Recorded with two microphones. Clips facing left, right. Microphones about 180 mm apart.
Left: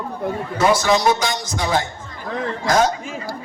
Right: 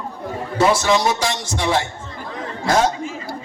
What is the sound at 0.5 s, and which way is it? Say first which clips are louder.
Speech: right 1 dB; 30° right (ahead or behind).